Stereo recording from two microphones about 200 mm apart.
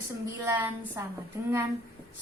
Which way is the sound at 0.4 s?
10° right (ahead or behind).